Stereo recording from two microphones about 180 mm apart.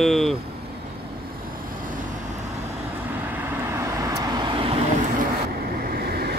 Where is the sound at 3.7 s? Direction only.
15° right (ahead or behind).